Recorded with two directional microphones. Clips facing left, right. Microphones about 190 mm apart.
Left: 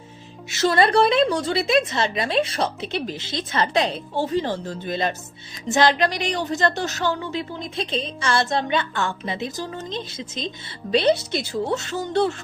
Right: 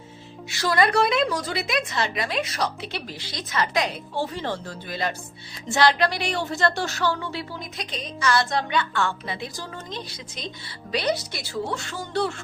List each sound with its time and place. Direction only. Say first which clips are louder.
0.5 s speech: left 3 dB; 25° left (ahead or behind)
4.4 s speech: left 6 dB; 15° left (ahead or behind)